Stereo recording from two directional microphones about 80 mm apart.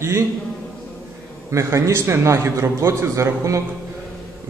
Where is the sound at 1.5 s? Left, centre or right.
Right.